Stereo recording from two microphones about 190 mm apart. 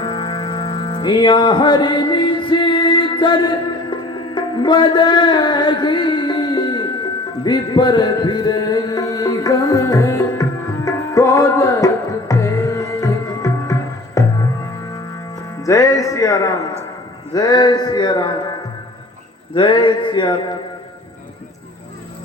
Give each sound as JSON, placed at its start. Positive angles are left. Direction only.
{"t": 0.0, "sound": "music", "side_deg": 25}
{"t": 10.8, "sound": "tabla", "side_deg": 15}
{"t": 12.3, "sound": "music", "side_deg": 15}
{"t": 15.6, "sound": "music", "side_deg": 15}
{"t": 17.3, "sound": "speech", "side_deg": 20}
{"t": 19.5, "sound": "speech", "side_deg": 25}